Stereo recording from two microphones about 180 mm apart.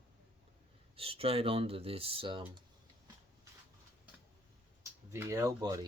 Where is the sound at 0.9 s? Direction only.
30° right (ahead or behind).